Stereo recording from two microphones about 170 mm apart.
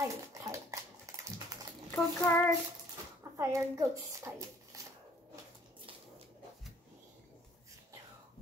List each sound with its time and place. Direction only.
0.0 s dog: 20° right (ahead or behind)
1.9 s a child's voice: 10° left (ahead or behind)
3.3 s a child's voice: 20° right (ahead or behind)
4.7 s a sound: 20° right (ahead or behind)